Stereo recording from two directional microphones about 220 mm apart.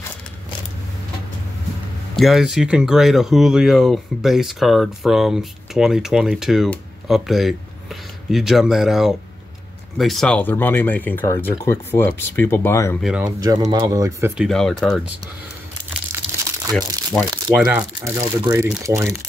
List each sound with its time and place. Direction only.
2.1 s speech: centre (ahead or behind)
13.0 s speech: 5° right (ahead or behind)
13.4 s speech: 15° right (ahead or behind)
14.3 s speech: centre (ahead or behind)
16.7 s speech: centre (ahead or behind)